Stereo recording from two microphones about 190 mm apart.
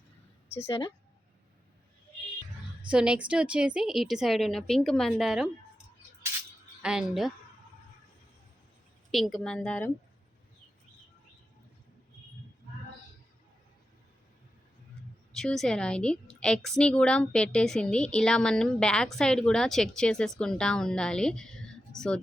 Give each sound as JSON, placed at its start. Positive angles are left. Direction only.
{"t": 0.5, "sound": "speech", "side_deg": 30}
{"t": 2.9, "sound": "a woman's voice", "side_deg": -5}
{"t": 6.8, "sound": "a woman's voice", "side_deg": 0}
{"t": 9.1, "sound": "a woman's voice", "side_deg": 0}
{"t": 15.3, "sound": "a woman's voice", "side_deg": 0}